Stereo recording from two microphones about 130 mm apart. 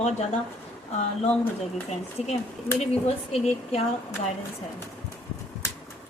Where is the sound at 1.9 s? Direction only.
55° left (ahead or behind).